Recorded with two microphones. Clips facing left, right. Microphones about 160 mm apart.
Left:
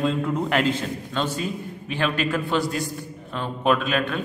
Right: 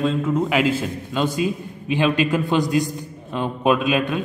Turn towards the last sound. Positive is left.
turn(degrees=-15)  # may be behind; listen again after turning